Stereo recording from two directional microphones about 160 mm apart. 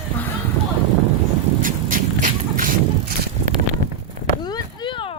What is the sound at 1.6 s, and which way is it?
Vehicle, 55° right (ahead or behind).